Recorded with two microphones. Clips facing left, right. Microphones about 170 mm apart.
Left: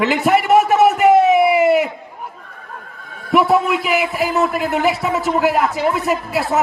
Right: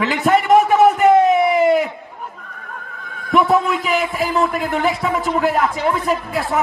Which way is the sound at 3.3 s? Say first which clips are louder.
Left 1 dB; 10° left (ahead or behind).